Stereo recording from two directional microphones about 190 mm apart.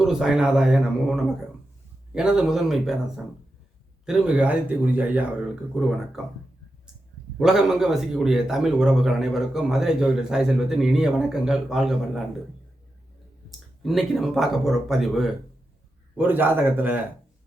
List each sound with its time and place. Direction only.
0.0 s a man's voice: 5° right (ahead or behind)
4.0 s a man's voice: 5° right (ahead or behind)
7.3 s a man's voice: 5° right (ahead or behind)
13.8 s a man's voice: centre (ahead or behind)